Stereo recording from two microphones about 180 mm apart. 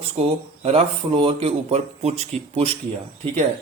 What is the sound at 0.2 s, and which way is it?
Speech, 35° right (ahead or behind).